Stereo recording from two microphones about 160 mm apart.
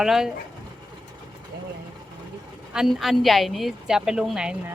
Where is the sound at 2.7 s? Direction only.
Centre (ahead or behind).